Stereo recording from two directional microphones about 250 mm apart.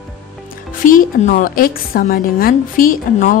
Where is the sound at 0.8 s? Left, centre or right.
Left.